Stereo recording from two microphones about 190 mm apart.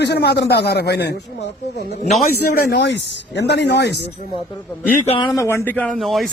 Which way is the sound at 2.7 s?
65° left (ahead or behind).